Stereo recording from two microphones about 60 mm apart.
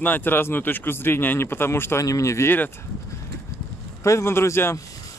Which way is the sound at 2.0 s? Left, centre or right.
Left.